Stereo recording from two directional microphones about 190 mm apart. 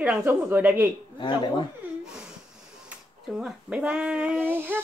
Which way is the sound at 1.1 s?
25° left (ahead or behind).